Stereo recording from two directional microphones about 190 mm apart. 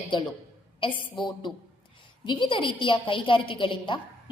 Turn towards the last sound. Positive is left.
turn(degrees=25)  # may be behind; listen again after turning